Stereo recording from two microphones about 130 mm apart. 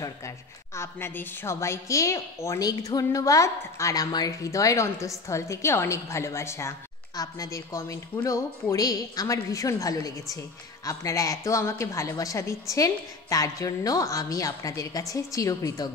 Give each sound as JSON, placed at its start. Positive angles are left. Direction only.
{"t": 0.7, "sound": "a woman's voice", "side_deg": 20}